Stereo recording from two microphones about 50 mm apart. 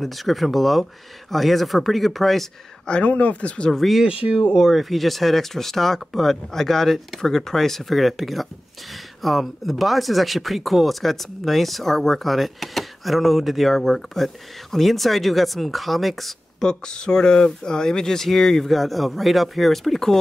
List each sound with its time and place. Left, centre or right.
0.0 s speech: centre
2.9 s speech: left
3.7 s speech: centre
4.0 s speech: right
4.6 s speech: centre
16.6 s speech: centre